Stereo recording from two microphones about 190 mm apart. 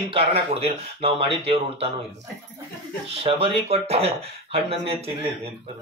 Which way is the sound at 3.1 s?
30° right (ahead or behind).